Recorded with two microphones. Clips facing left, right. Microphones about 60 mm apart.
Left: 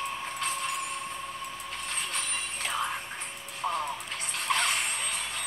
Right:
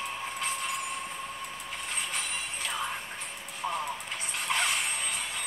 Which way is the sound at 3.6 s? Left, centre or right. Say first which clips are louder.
Left 2 dB; left.